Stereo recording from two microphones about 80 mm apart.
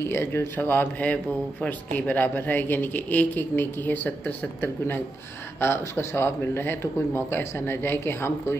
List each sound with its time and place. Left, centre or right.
0.0 s speech: left